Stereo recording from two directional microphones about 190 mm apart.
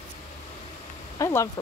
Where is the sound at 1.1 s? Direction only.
15° left (ahead or behind).